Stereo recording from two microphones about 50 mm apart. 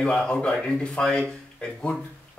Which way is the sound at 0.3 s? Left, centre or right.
Centre.